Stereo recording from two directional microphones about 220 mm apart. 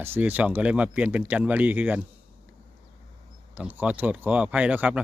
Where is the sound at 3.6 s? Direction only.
5° right (ahead or behind).